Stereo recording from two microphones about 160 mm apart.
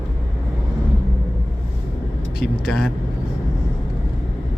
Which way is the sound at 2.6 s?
Centre (ahead or behind).